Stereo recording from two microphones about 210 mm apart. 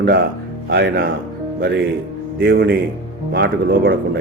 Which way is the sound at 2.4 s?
50° right (ahead or behind).